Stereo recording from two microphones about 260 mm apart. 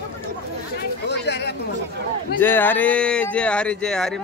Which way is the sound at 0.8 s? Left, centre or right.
Left.